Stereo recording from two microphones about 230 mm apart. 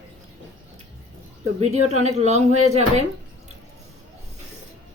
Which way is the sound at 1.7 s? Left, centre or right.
Right.